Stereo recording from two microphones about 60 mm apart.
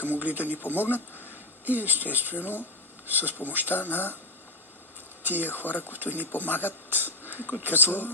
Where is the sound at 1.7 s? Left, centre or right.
Right.